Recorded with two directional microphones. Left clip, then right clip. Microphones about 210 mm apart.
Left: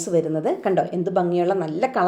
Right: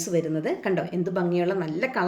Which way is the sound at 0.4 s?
25° right (ahead or behind).